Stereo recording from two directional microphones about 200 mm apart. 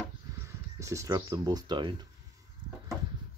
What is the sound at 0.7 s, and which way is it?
Speech, 15° right (ahead or behind).